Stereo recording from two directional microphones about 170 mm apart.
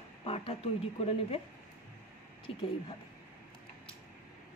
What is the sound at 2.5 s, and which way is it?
Speech, 30° left (ahead or behind).